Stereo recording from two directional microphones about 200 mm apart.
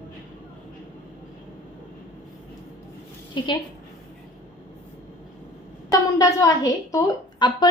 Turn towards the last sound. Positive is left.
turn(degrees=20)  # may be behind; listen again after turning